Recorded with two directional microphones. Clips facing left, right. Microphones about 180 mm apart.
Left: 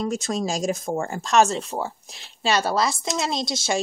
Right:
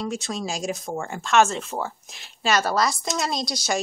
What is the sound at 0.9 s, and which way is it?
Speech, 35° left (ahead or behind).